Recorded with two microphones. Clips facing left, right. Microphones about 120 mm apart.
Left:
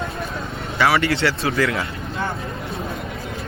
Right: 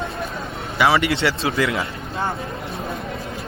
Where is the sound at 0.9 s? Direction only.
25° right (ahead or behind).